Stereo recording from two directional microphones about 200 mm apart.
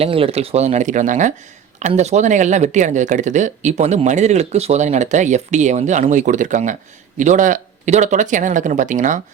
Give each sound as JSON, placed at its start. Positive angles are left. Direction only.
{"t": 0.0, "sound": "speech", "side_deg": -30}